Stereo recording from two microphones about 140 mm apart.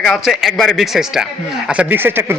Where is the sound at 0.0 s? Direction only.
Centre (ahead or behind).